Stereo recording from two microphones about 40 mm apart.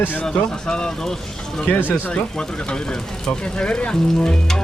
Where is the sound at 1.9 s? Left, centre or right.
Left.